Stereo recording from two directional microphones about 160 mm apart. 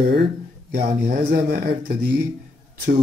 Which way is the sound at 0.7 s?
65° right (ahead or behind).